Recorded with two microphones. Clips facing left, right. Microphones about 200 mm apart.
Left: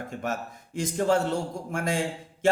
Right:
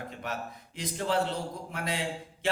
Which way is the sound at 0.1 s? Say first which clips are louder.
Left 5 dB; 45° left (ahead or behind).